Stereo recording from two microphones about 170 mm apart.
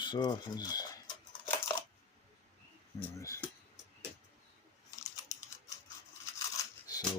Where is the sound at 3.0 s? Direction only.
15° left (ahead or behind).